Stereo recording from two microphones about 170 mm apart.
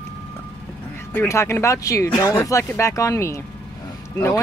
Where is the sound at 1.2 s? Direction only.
15° left (ahead or behind).